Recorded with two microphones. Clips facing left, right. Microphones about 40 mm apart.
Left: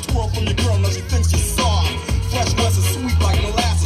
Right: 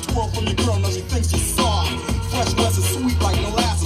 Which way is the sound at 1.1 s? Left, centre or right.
Right.